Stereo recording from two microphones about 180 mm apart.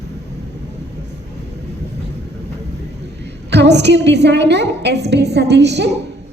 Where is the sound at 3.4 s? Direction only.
70° right (ahead or behind).